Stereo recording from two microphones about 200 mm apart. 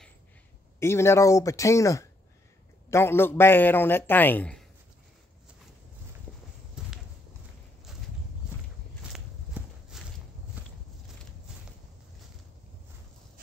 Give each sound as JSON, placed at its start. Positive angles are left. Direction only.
{"t": 0.7, "sound": "a man's voice", "side_deg": 15}
{"t": 6.8, "sound": "a sound", "side_deg": -5}
{"t": 9.1, "sound": "clip-clop", "side_deg": 0}
{"t": 10.6, "sound": "walk", "side_deg": -10}